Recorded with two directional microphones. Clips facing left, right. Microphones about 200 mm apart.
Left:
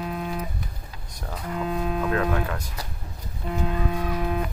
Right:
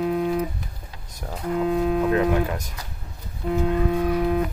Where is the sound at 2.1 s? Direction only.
20° right (ahead or behind).